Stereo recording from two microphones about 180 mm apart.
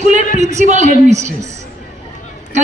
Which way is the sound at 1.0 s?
40° right (ahead or behind).